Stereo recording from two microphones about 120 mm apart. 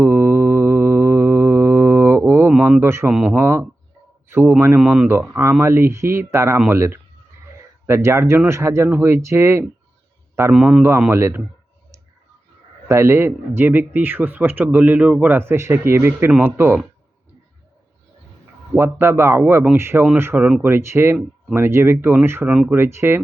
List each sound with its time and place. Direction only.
0.0 s mantra: 20° right (ahead or behind)
2.5 s a sound: 10° right (ahead or behind)
3.1 s speech: 5° right (ahead or behind)
3.3 s a man's voice: 20° right (ahead or behind)
4.8 s speech: 5° right (ahead or behind)
5.3 s speech: 20° right (ahead or behind)
10.5 s a man's voice: 5° right (ahead or behind)
11.1 s speech: 20° right (ahead or behind)
12.9 s speech: 20° right (ahead or behind)
18.8 s speech: 20° right (ahead or behind)